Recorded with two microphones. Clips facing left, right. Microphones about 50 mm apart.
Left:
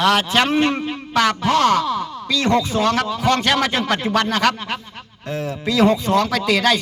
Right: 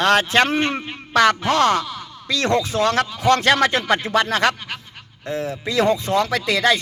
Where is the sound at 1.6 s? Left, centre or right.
Right.